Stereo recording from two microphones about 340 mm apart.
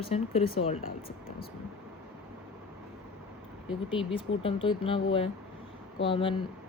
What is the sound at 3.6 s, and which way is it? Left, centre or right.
Speech, centre.